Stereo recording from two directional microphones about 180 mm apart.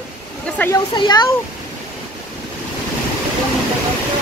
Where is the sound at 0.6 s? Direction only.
10° left (ahead or behind).